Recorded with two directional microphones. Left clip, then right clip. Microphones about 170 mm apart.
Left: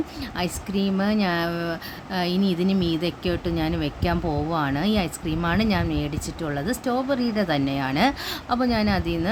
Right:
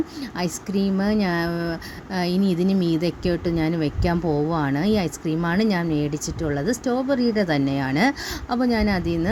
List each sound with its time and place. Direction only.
0.3 s a woman's voice: 20° right (ahead or behind)